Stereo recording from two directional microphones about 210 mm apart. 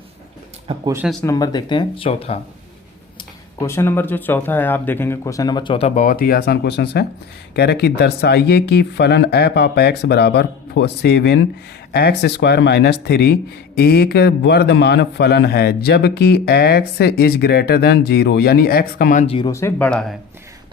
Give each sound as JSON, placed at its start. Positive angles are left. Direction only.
{"t": 0.7, "sound": "speech", "side_deg": -30}
{"t": 1.2, "sound": "speech", "side_deg": 15}
{"t": 3.2, "sound": "a man's voice", "side_deg": 15}
{"t": 19.5, "sound": "speech", "side_deg": 15}